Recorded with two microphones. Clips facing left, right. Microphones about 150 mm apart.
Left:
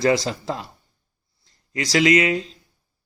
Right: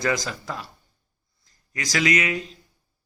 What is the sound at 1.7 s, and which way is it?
Speech, 30° left (ahead or behind).